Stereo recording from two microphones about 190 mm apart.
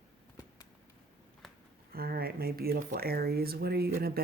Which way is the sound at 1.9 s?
50° right (ahead or behind).